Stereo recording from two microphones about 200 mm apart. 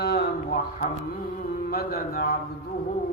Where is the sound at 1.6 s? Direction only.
50° left (ahead or behind).